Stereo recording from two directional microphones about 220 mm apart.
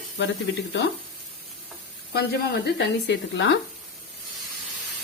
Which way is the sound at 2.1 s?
50° left (ahead or behind).